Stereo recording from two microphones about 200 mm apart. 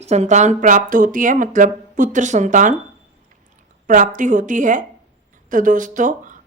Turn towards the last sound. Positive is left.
turn(degrees=-40)  # may be behind; listen again after turning